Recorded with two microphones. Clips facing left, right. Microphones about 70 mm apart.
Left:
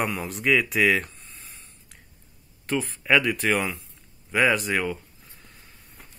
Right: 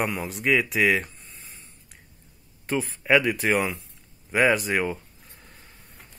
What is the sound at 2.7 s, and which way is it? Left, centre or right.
Speech, centre.